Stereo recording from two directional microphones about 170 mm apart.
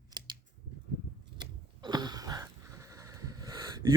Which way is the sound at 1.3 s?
25° right (ahead or behind).